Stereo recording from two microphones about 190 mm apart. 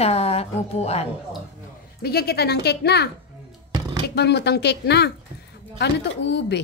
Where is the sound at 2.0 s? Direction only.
55° left (ahead or behind).